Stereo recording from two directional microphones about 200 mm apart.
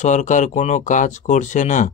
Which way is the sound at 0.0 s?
35° left (ahead or behind).